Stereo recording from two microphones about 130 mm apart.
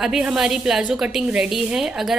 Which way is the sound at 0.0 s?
5° right (ahead or behind).